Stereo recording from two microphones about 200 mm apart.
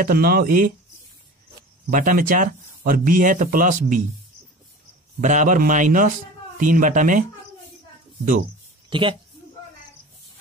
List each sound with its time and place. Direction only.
0.0 s speech: 50° right (ahead or behind)
1.9 s speech: 40° right (ahead or behind)
5.2 s a man's voice: 40° right (ahead or behind)
8.9 s speech: 25° right (ahead or behind)